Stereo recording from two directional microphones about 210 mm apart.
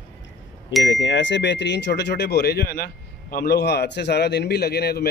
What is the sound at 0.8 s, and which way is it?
A man's voice, 55° left (ahead or behind).